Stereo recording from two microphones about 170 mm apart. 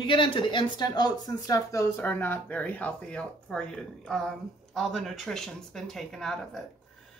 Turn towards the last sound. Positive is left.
turn(degrees=0)  # may be behind; listen again after turning